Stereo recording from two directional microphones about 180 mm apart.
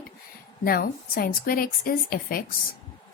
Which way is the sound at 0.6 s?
55° left (ahead or behind).